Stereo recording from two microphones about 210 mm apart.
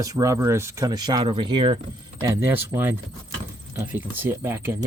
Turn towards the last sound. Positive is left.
turn(degrees=-10)  # may be behind; listen again after turning